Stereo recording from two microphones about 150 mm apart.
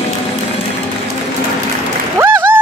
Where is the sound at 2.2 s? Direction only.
15° right (ahead or behind).